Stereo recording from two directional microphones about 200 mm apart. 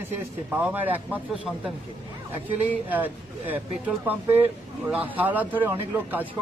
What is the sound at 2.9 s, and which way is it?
Speech, 10° right (ahead or behind).